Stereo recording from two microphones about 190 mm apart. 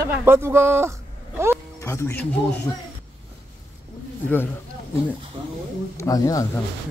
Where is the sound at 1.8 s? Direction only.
15° left (ahead or behind).